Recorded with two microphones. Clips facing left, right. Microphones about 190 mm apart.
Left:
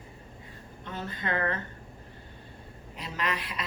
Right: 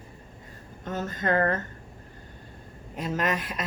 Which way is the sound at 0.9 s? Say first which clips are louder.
Right 6 dB; 45° right (ahead or behind).